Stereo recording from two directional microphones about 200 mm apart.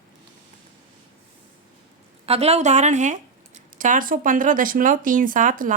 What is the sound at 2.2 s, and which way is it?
Speech, 30° right (ahead or behind).